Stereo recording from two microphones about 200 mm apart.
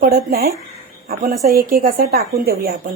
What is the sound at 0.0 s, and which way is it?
Speech, 50° right (ahead or behind).